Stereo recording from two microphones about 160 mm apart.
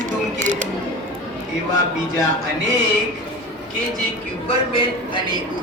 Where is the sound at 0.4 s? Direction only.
50° right (ahead or behind).